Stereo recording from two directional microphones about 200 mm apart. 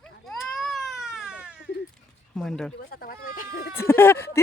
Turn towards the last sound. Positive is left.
turn(degrees=10)  # may be behind; listen again after turning